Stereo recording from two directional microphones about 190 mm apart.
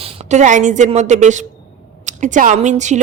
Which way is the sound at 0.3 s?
40° right (ahead or behind).